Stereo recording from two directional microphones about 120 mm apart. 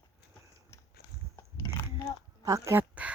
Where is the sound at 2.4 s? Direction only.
25° right (ahead or behind).